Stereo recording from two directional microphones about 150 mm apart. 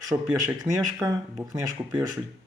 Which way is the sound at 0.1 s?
15° right (ahead or behind).